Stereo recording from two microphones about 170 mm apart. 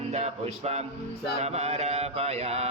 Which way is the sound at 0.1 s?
40° right (ahead or behind).